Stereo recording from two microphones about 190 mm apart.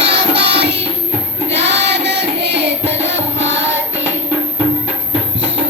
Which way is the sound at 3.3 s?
70° right (ahead or behind).